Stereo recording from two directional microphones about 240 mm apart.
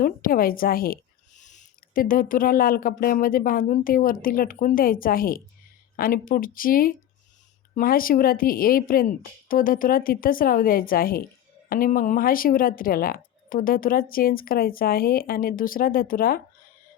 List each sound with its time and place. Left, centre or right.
0.0 s a woman's voice: left